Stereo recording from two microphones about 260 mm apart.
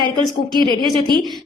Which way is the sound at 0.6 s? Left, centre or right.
Centre.